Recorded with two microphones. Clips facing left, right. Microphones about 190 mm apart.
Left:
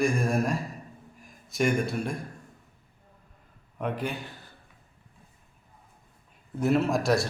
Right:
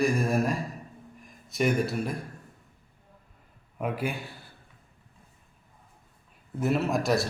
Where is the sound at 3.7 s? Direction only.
5° right (ahead or behind).